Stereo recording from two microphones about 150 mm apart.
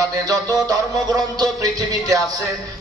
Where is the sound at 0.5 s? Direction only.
25° right (ahead or behind).